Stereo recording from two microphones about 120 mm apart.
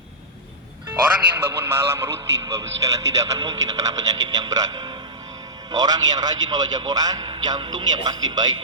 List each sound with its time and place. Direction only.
1.4 s speech: 20° right (ahead or behind); by 8.5 s 35° right (ahead or behind)